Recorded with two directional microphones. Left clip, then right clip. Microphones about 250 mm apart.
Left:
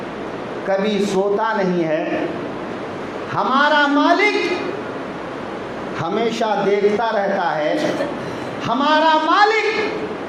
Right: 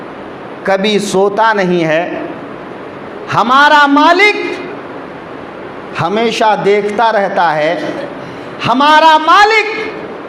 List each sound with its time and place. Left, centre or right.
0.7 s speech: right
3.2 s a man's voice: right
6.0 s a man's voice: right